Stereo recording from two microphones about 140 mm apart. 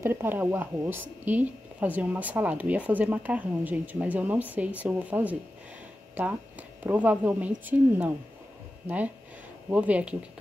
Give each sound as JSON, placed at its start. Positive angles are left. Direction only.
{"t": 0.0, "sound": "a woman's voice", "side_deg": -15}
{"t": 6.8, "sound": "a woman's voice", "side_deg": -10}